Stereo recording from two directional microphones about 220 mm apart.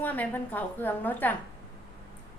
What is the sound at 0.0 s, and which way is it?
A woman's voice, 10° left (ahead or behind).